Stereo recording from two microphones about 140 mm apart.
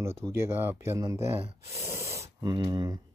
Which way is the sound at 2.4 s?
30° right (ahead or behind).